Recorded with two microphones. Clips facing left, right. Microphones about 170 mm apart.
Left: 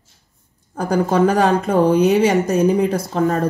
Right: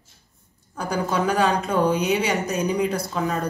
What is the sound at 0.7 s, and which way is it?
Speech, 55° left (ahead or behind).